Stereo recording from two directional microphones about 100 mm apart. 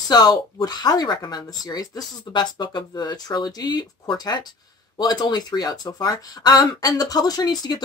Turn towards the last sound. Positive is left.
turn(degrees=40)  # may be behind; listen again after turning